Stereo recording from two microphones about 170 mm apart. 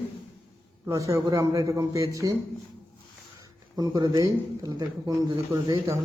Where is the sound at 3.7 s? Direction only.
20° right (ahead or behind).